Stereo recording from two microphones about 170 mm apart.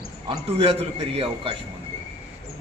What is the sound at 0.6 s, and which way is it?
A man's voice, 35° right (ahead or behind).